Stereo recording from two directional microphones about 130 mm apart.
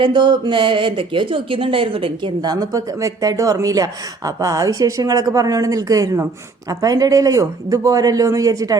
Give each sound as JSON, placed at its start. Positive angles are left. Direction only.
{"t": 0.0, "sound": "speech", "side_deg": -35}